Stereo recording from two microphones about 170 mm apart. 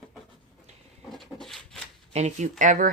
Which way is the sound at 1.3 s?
Centre (ahead or behind).